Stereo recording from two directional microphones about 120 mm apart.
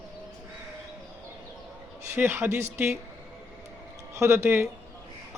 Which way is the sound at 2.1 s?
20° right (ahead or behind).